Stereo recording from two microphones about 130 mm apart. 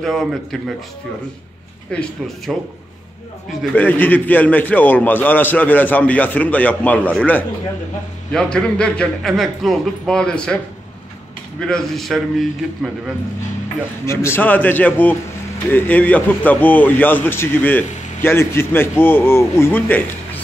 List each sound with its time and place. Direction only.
0.0 s a man's voice: centre (ahead or behind)
1.9 s a man's voice: 5° left (ahead or behind)
3.7 s a man's voice: 15° left (ahead or behind)
11.6 s a man's voice: 5° left (ahead or behind)
14.0 s a man's voice: 20° left (ahead or behind)